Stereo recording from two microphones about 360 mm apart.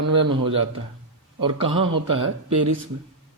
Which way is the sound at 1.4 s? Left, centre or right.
Centre.